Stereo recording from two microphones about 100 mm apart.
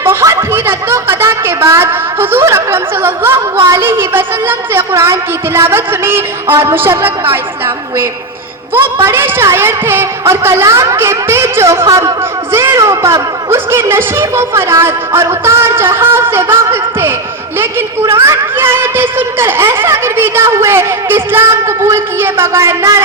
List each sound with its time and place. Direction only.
0.0 s snicker: 30° right (ahead or behind)
3.7 s speech: 25° right (ahead or behind)
8.7 s speech: 25° right (ahead or behind)